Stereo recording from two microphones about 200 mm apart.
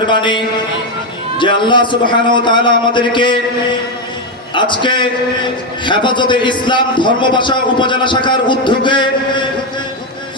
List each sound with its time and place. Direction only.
0.1 s a man's voice: 25° left (ahead or behind)